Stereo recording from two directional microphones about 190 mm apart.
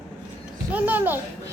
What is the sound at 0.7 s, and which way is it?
Speech, 10° right (ahead or behind).